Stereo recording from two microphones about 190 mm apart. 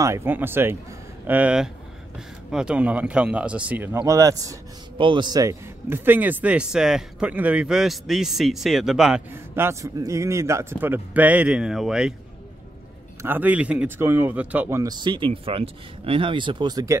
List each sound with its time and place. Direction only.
0.0 s speech: 15° right (ahead or behind)
13.2 s speech: 10° right (ahead or behind)